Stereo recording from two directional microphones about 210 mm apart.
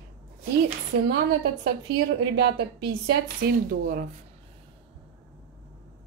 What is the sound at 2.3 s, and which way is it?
Speech, 50° right (ahead or behind).